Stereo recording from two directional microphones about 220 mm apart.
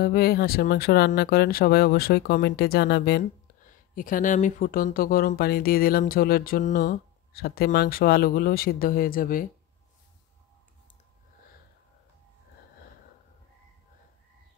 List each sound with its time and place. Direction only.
0.0 s speech: 45° left (ahead or behind)